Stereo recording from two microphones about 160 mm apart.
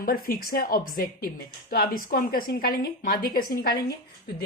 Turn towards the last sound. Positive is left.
turn(degrees=65)  # may be behind; listen again after turning